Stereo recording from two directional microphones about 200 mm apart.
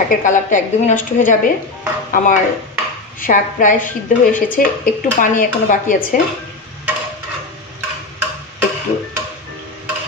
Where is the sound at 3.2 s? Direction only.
40° left (ahead or behind).